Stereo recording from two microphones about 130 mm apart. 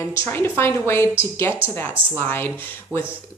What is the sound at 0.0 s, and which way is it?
A woman's voice, 20° left (ahead or behind).